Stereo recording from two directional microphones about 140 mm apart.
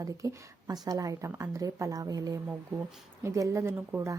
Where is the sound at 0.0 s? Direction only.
25° right (ahead or behind).